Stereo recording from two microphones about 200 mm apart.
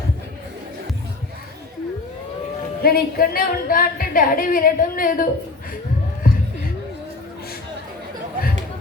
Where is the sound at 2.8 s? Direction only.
50° left (ahead or behind).